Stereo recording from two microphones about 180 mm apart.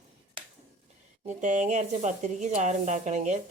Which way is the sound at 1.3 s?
40° right (ahead or behind).